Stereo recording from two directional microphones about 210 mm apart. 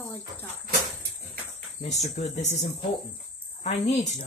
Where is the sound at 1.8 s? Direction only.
30° left (ahead or behind).